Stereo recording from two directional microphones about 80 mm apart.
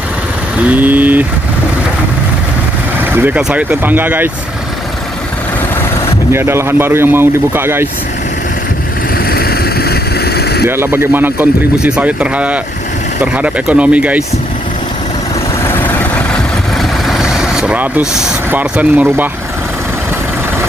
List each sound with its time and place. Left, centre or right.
0.7 s speech: right
3.0 s vehicle: right
3.3 s speech: centre
6.3 s speech: right
10.7 s speech: right
15.6 s vehicle: left
16.7 s vehicle: centre
18.5 s speech: right